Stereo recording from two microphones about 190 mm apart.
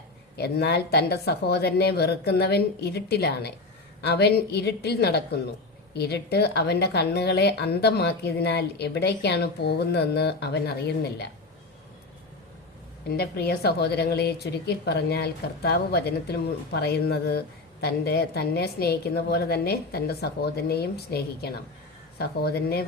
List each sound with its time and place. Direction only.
0.3 s a woman's voice: 60° left (ahead or behind)
13.1 s a woman's voice: 55° left (ahead or behind)